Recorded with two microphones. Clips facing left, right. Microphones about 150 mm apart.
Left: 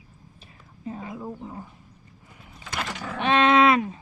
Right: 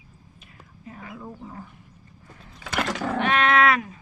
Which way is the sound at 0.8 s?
25° left (ahead or behind).